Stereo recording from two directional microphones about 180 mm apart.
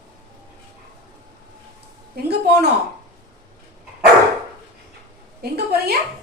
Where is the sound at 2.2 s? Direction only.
60° right (ahead or behind).